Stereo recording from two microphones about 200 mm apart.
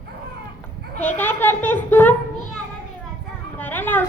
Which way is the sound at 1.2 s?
10° left (ahead or behind).